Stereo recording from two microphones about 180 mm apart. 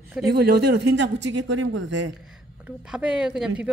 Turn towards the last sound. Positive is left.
turn(degrees=-5)  # may be behind; listen again after turning